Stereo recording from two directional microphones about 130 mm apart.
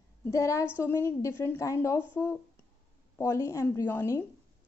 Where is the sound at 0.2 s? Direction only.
25° left (ahead or behind).